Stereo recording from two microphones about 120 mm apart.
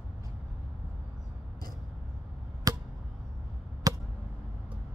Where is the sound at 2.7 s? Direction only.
30° right (ahead or behind).